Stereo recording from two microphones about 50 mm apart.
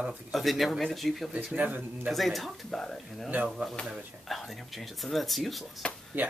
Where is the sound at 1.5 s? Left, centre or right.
Right.